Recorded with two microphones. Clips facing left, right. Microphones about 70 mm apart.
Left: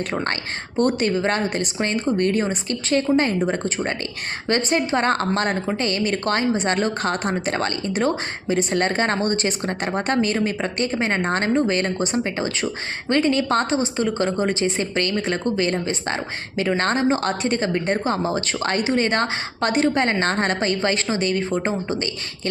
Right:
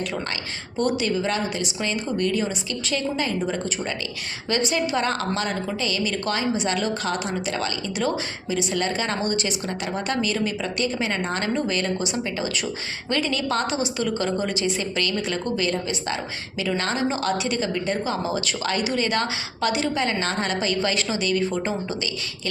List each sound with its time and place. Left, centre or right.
0.8 s a woman's voice: left